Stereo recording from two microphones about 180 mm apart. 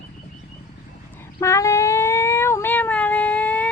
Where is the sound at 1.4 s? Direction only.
15° left (ahead or behind).